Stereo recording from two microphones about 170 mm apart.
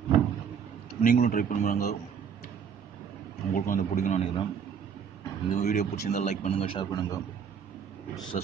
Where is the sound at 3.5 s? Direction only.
50° left (ahead or behind).